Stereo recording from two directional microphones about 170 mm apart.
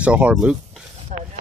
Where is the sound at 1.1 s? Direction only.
45° right (ahead or behind).